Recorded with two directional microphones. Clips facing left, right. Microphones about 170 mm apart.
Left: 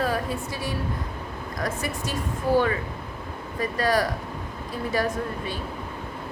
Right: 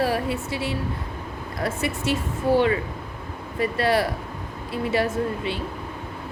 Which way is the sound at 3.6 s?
30° right (ahead or behind).